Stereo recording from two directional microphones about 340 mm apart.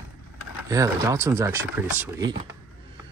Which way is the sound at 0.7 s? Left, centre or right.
Centre.